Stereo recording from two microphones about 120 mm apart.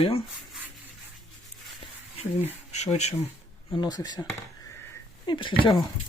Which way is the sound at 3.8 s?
35° left (ahead or behind).